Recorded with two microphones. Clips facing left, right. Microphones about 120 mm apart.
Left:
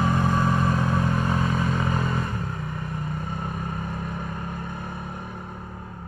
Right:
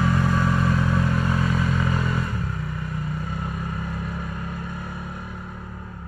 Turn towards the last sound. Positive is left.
turn(degrees=45)  # may be behind; listen again after turning